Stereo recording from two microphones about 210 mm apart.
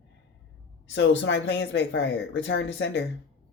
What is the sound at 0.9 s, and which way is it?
Speech, 60° left (ahead or behind).